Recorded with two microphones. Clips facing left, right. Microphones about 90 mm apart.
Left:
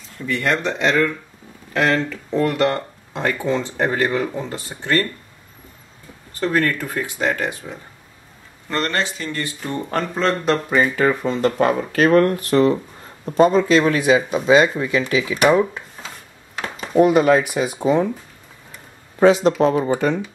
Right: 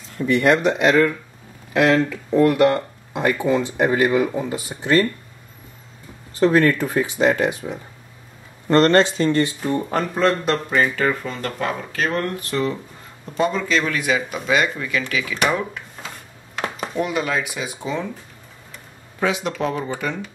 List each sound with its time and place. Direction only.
0.2 s speech: 15° right (ahead or behind)
6.4 s speech: 20° right (ahead or behind)
8.6 s speech: 35° right (ahead or behind)
9.6 s speech: 5° right (ahead or behind)
10.7 s speech: 15° left (ahead or behind)
11.2 s speech: 25° left (ahead or behind)
11.5 s speech: 45° left (ahead or behind); by 15.3 s 25° left (ahead or behind)
16.9 s speech: 45° left (ahead or behind)
19.1 s speech: 35° left (ahead or behind)